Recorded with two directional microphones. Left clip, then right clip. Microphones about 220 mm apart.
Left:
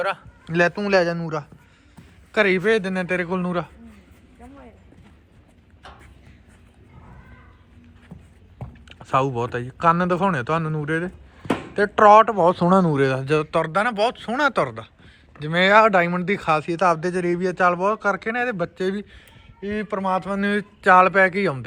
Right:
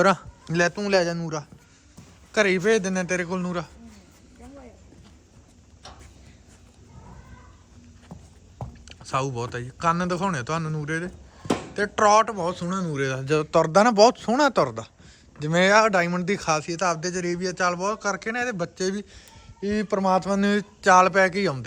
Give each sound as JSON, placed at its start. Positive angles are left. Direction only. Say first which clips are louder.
{"t": 0.0, "sound": "a man's voice", "louder": "right 5 dB", "side_deg": -40}
{"t": 0.5, "sound": "a man's voice", "louder": "left 3 dB", "side_deg": -10}
{"t": 8.1, "sound": "music", "louder": "right 2 dB", "side_deg": -35}
{"t": 9.0, "sound": "a man's voice", "louder": "left 6 dB", "side_deg": -5}
{"t": 19.1, "sound": "speech", "louder": "even", "side_deg": -25}